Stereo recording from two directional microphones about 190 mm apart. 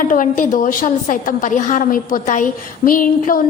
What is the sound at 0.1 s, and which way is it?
A woman's voice, 45° left (ahead or behind).